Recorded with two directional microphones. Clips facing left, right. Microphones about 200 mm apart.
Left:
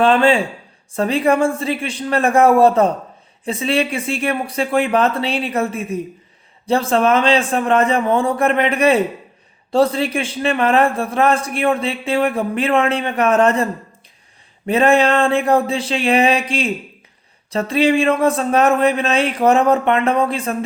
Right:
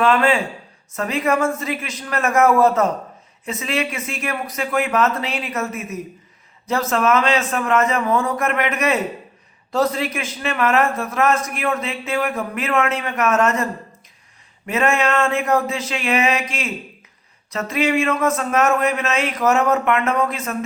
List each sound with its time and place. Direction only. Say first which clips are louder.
0.0 s a man's voice: left 3 dB; 30° left (ahead or behind)
14.7 s a man's voice: left 5 dB; 35° left (ahead or behind)